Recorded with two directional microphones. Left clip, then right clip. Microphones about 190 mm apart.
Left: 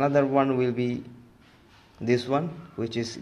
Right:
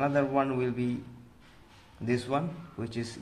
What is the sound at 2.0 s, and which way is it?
Speech, 25° left (ahead or behind).